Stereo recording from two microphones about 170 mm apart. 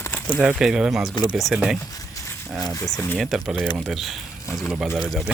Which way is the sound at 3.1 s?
Centre (ahead or behind).